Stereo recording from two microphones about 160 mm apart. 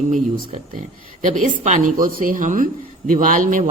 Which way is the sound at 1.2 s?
55° right (ahead or behind).